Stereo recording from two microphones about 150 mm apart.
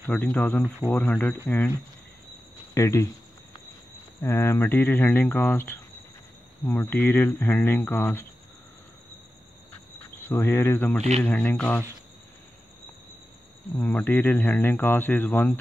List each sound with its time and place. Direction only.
0.0 s speech: 5° left (ahead or behind)
4.2 s speech: 20° left (ahead or behind)
10.1 s cricket: 20° left (ahead or behind)
10.8 s speech: 10° left (ahead or behind)
13.7 s speech: 5° left (ahead or behind)